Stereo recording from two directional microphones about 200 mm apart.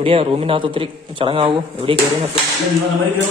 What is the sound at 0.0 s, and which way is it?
A man's voice, 30° right (ahead or behind).